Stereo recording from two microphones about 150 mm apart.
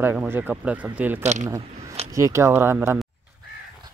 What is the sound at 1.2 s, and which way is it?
Speech, 50° right (ahead or behind).